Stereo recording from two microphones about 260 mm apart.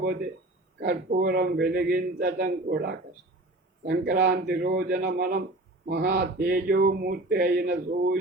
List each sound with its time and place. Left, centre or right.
0.8 s speech: right